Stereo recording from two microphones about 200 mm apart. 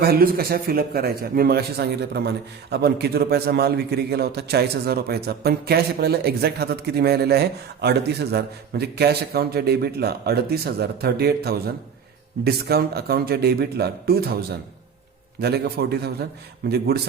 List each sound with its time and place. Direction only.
0.0 s a man's voice: 50° right (ahead or behind)
15.4 s a man's voice: 55° right (ahead or behind)